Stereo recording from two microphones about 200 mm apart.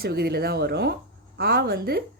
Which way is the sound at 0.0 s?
50° right (ahead or behind).